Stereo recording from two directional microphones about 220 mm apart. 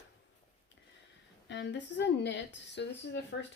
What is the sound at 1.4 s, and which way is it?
Speech, 55° left (ahead or behind).